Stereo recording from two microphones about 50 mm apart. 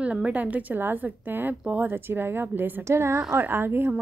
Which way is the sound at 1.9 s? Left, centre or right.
Right.